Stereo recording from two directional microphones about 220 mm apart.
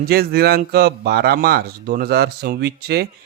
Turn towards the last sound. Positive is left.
turn(degrees=-45)  # may be behind; listen again after turning